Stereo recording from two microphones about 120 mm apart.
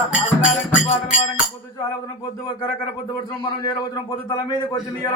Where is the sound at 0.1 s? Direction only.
5° right (ahead or behind).